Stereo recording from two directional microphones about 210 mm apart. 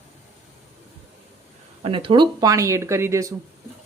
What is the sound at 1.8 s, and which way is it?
Speech, 25° right (ahead or behind).